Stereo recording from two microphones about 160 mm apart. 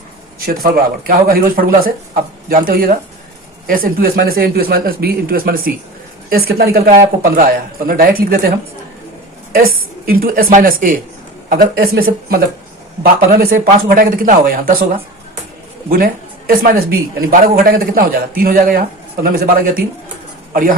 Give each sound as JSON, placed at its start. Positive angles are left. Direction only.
{"t": 0.3, "sound": "a man's voice", "side_deg": -70}
{"t": 16.5, "sound": "a man's voice", "side_deg": -65}